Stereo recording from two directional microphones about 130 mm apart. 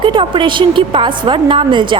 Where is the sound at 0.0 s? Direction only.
40° right (ahead or behind).